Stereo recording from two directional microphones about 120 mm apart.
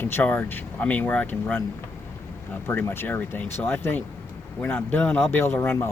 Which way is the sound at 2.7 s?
15° left (ahead or behind).